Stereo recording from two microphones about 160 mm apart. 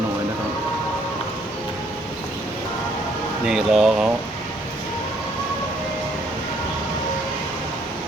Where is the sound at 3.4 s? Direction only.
5° right (ahead or behind).